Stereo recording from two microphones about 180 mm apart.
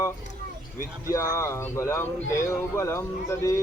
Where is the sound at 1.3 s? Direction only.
15° left (ahead or behind).